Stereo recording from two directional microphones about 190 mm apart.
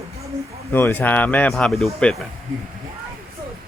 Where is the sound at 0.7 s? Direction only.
10° left (ahead or behind).